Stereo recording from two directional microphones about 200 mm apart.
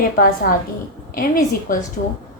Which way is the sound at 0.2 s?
45° left (ahead or behind).